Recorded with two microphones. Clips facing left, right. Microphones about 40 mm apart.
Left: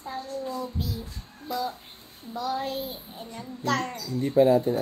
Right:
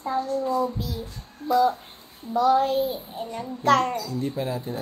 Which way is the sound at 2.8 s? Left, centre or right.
Centre.